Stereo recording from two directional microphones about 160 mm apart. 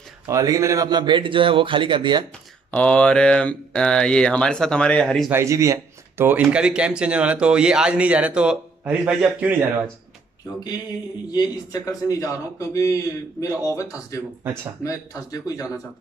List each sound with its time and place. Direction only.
0.3 s speech: 20° right (ahead or behind)
2.7 s speech: 5° left (ahead or behind)
5.3 s speech: 20° right (ahead or behind)
11.3 s a man's voice: 20° left (ahead or behind)